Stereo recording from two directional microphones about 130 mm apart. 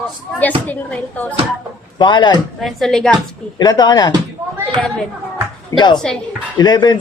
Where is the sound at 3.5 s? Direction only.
30° left (ahead or behind).